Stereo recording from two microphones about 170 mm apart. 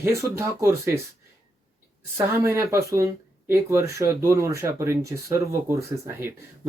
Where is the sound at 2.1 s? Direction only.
15° right (ahead or behind).